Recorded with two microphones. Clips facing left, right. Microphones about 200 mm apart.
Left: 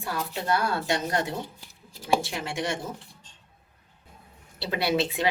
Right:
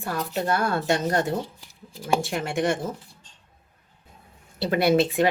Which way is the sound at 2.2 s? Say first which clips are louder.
Right 6 dB; 50° right (ahead or behind).